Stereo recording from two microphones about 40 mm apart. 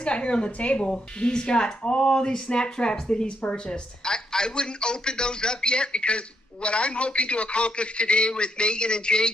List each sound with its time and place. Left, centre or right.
0.0 s a man's voice: left